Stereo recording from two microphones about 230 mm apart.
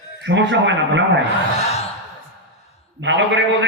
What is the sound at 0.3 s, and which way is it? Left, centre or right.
Speech, right.